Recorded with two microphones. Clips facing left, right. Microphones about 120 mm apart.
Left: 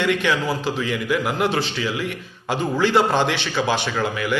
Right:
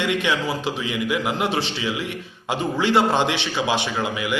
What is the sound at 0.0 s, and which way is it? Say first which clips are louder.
A man's voice: left 2 dB; 20° right (ahead or behind).